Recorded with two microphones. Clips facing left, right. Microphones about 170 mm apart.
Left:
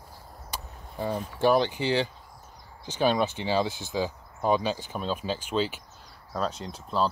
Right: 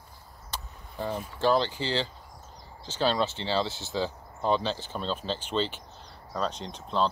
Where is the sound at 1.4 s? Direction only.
15° left (ahead or behind).